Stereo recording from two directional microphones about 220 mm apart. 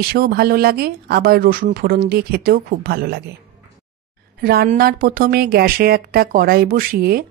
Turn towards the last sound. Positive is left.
turn(degrees=-45)  # may be behind; listen again after turning